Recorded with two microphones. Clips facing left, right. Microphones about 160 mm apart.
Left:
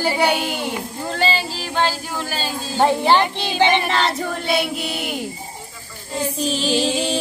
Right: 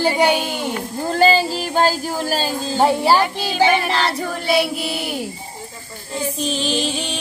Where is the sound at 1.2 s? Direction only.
40° right (ahead or behind).